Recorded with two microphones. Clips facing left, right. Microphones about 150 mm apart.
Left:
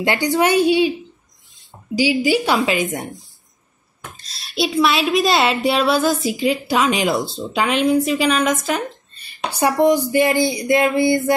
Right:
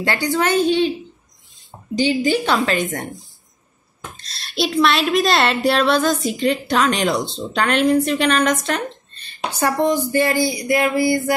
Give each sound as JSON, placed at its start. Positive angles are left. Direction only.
{"t": 0.0, "sound": "a woman's voice", "side_deg": 15}
{"t": 2.0, "sound": "a woman's voice", "side_deg": 10}
{"t": 4.2, "sound": "a woman's voice", "side_deg": 0}